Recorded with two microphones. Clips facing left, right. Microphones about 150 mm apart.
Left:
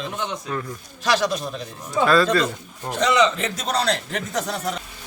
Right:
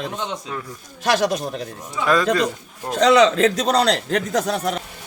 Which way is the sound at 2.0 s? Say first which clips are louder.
Even; 15° right (ahead or behind).